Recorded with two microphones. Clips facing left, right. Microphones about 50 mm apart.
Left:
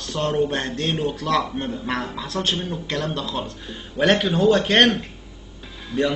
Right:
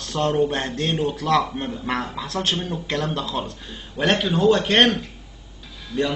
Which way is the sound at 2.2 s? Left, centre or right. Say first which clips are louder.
Even; right.